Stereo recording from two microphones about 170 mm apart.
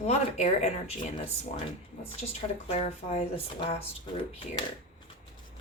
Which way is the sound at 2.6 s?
40° left (ahead or behind).